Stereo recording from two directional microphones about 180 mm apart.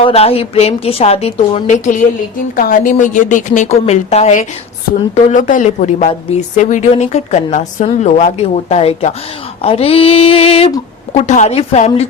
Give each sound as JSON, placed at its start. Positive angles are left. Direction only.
{"t": 0.0, "sound": "a woman's voice", "side_deg": 35}